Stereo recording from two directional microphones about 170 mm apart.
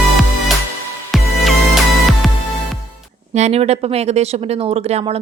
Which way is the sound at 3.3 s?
40° right (ahead or behind).